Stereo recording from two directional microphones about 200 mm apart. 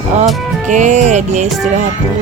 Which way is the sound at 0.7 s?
35° right (ahead or behind).